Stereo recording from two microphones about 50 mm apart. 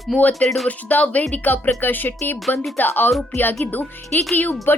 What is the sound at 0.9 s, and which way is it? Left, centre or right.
Speech, left.